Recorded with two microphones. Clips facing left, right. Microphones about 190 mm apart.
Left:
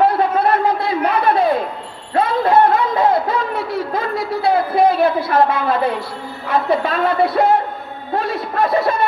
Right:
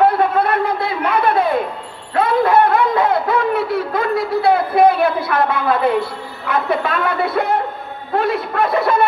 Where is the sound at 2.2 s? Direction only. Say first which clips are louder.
Even; 55° right (ahead or behind).